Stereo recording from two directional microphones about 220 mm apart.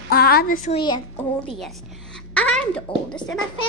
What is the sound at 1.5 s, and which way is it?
A woman's voice, centre (ahead or behind).